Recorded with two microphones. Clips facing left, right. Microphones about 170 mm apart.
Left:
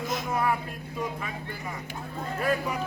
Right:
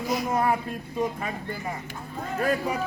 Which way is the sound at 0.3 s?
40° right (ahead or behind).